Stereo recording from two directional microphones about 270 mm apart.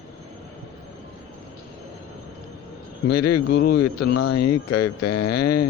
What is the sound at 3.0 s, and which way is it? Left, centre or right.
Speech, left.